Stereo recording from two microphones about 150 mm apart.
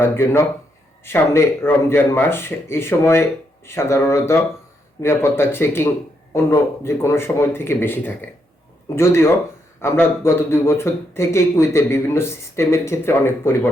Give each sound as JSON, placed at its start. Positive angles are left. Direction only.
{"t": 0.0, "sound": "speech", "side_deg": 15}